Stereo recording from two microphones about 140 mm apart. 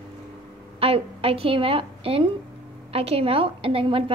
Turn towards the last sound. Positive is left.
turn(degrees=-40)  # may be behind; listen again after turning